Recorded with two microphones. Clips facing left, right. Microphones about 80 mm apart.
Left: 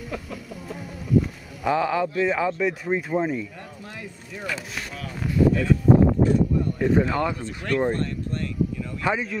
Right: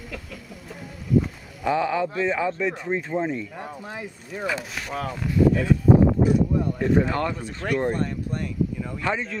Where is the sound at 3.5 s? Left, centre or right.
Right.